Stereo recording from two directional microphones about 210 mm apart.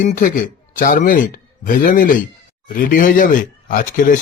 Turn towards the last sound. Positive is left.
turn(degrees=40)  # may be behind; listen again after turning